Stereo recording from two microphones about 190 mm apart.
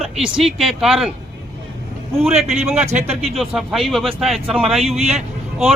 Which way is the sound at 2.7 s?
35° right (ahead or behind).